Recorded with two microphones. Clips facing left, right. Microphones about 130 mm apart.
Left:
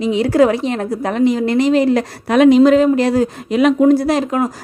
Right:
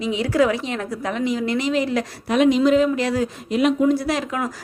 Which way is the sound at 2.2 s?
75° left (ahead or behind).